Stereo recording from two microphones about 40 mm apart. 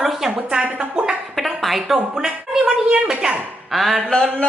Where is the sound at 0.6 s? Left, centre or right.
Right.